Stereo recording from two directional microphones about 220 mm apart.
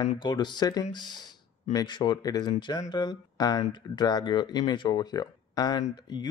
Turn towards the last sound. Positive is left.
turn(degrees=20)  # may be behind; listen again after turning